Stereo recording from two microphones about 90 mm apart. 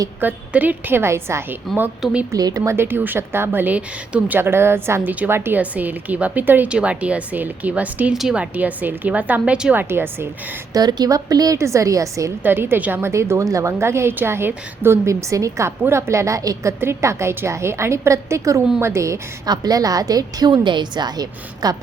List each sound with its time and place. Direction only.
0.2 s a woman's voice: 20° right (ahead or behind)
2.3 s a woman's voice: 40° right (ahead or behind)
2.7 s a woman's voice: 25° right (ahead or behind)
4.4 s a woman's voice: 25° right (ahead or behind)
8.1 s a woman's voice: 5° right (ahead or behind)
8.5 s a woman's voice: 20° right (ahead or behind)
10.8 s a woman's voice: 50° right (ahead or behind)
12.4 s a woman's voice: 25° right (ahead or behind)
19.5 s a woman's voice: 45° right (ahead or behind)